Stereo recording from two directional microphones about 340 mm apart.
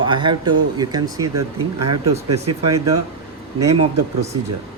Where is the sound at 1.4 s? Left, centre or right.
Right.